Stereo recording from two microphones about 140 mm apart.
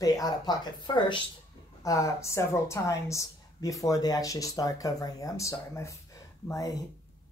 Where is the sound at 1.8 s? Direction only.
25° left (ahead or behind).